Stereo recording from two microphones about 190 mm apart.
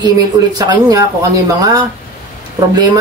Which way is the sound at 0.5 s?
20° right (ahead or behind).